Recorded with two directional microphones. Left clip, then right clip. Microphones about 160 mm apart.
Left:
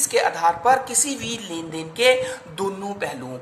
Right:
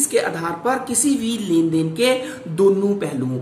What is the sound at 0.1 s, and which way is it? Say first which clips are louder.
Speech: left 4 dB; 45° left (ahead or behind).